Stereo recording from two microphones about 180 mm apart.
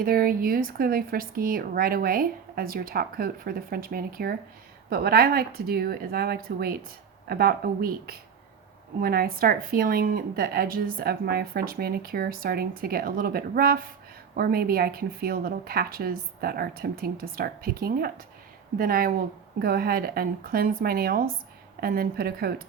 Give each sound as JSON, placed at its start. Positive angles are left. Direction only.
{"t": 0.0, "sound": "a woman's voice", "side_deg": -55}